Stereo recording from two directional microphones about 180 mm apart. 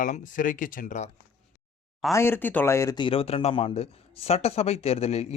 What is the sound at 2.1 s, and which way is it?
Speech, 15° left (ahead or behind).